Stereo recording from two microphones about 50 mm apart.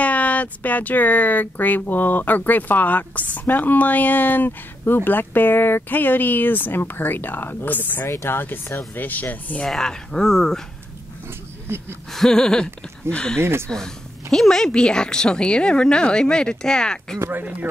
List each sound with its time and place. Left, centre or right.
0.0 s speech: left
9.7 s a woman's voice: centre
12.1 s a woman's voice: centre
13.4 s speech: right
14.3 s a woman's voice: centre